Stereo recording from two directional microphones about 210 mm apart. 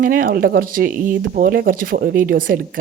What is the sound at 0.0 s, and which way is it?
Speech, 40° right (ahead or behind).